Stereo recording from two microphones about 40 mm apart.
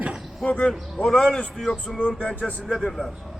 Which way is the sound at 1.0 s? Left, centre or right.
Left.